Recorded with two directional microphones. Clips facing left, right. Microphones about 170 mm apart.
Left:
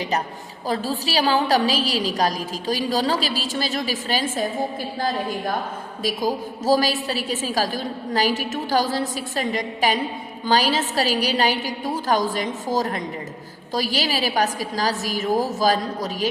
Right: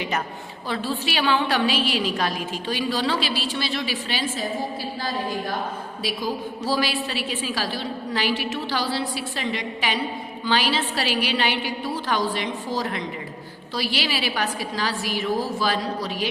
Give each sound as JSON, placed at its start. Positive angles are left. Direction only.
{"t": 0.7, "sound": "a woman's voice", "side_deg": 40}
{"t": 6.0, "sound": "a woman's voice", "side_deg": 45}